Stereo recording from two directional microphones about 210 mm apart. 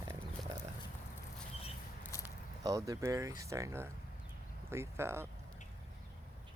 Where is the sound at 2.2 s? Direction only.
15° right (ahead or behind).